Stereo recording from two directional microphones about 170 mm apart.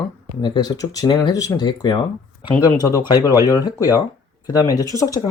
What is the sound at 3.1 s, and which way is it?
Speech, 20° left (ahead or behind).